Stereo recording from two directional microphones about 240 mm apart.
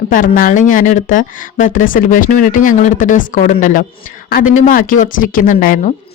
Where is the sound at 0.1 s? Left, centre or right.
Left.